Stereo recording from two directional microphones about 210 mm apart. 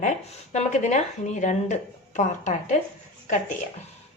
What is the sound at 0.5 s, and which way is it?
Speech, 35° left (ahead or behind).